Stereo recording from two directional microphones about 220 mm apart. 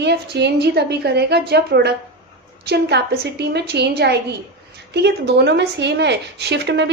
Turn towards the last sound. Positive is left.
turn(degrees=-50)  # may be behind; listen again after turning